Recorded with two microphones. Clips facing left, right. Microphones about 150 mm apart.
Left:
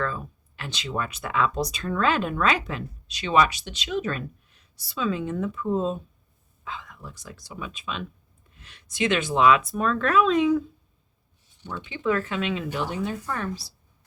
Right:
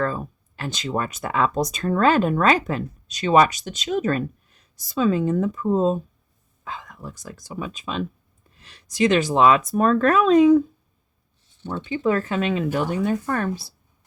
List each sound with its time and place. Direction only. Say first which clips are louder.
0.0 s speech: right 5 dB; 45° right (ahead or behind)
11.6 s speech: right 5 dB; 40° right (ahead or behind)